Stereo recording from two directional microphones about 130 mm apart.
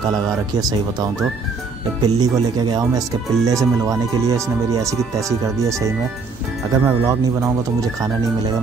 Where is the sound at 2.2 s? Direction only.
30° right (ahead or behind).